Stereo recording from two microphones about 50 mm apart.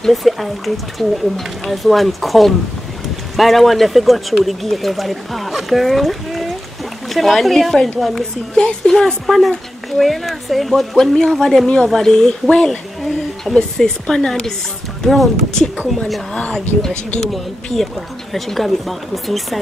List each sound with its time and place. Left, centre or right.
0.0 s a woman's voice: centre
15.0 s speech: centre
16.5 s a woman's voice: centre